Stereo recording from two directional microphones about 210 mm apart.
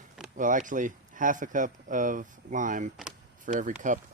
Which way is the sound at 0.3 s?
40° right (ahead or behind).